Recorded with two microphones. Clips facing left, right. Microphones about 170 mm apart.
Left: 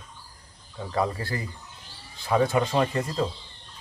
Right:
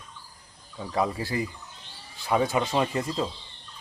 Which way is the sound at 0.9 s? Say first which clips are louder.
Right 1 dB; 15° right (ahead or behind).